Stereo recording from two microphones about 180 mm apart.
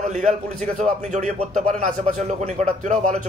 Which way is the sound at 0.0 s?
40° right (ahead or behind).